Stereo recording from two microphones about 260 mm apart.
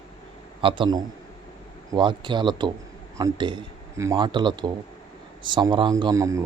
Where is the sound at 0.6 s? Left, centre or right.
Centre.